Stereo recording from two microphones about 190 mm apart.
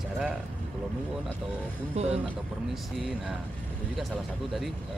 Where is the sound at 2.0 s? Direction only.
35° right (ahead or behind).